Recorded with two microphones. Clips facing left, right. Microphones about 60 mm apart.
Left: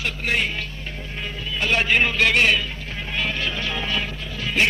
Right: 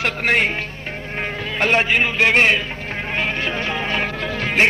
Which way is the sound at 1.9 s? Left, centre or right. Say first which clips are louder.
Right 1 dB; centre.